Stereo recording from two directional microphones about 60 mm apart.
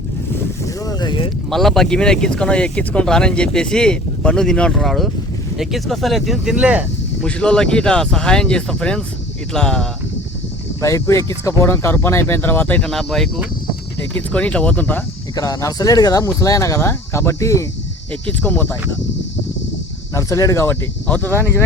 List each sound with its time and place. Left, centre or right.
0.7 s boat: left
1.5 s speech: centre
4.7 s speech: centre
7.3 s speech: centre
10.8 s speech: left
12.8 s speech: centre
14.0 s speech: left
15.4 s speech: left
16.4 s speech: left
18.1 s speech: left
20.1 s speech: left
21.1 s speech: left